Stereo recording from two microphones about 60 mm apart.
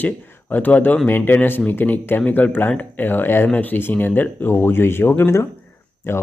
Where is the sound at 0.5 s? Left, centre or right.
Left.